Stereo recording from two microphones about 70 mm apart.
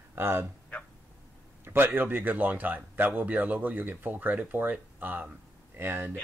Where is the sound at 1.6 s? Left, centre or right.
Right.